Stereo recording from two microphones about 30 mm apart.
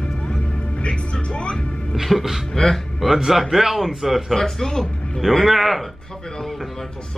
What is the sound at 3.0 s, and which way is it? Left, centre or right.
Speech, centre.